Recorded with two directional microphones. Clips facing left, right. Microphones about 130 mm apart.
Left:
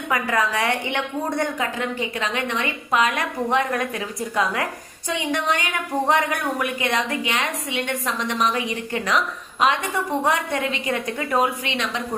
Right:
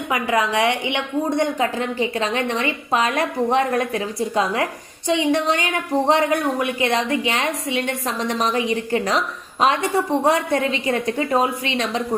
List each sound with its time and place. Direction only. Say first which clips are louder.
0.1 s a woman's voice: right 2 dB; 20° right (ahead or behind)
1.5 s a woman's voice: right 4 dB; 30° right (ahead or behind)